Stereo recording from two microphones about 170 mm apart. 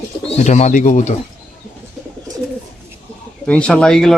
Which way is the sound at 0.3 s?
40° left (ahead or behind).